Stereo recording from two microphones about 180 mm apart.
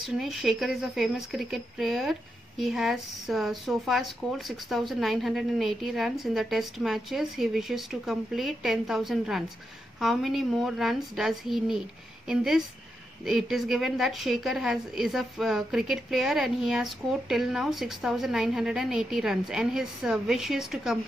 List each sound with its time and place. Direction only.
0.0 s speech: centre (ahead or behind)